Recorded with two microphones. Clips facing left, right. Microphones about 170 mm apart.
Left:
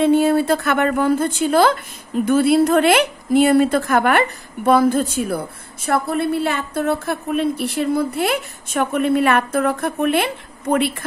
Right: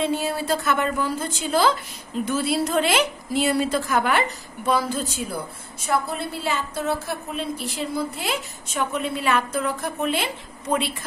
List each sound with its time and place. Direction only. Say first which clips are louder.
0.0 s a woman's voice: left 10 dB; 55° left (ahead or behind)